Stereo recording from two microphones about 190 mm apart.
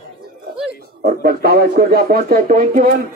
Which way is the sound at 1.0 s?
55° right (ahead or behind).